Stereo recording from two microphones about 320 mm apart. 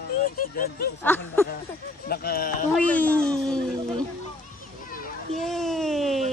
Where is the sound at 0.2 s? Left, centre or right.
Left.